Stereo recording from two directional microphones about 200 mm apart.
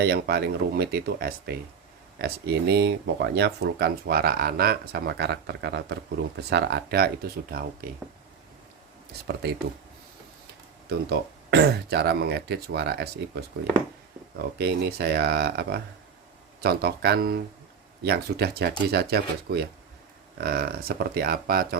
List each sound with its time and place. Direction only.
0.0 s speech: 50° right (ahead or behind)
10.8 s speech: 55° right (ahead or behind)